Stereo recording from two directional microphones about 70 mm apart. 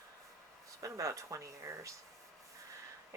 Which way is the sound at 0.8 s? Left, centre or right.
Right.